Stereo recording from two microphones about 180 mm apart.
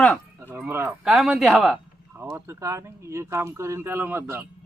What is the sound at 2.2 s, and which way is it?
Speech, 15° right (ahead or behind).